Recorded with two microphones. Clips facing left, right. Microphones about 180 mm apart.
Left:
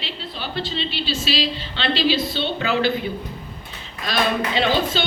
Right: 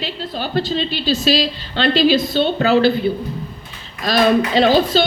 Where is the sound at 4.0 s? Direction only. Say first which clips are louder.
Right 7 dB; 40° right (ahead or behind).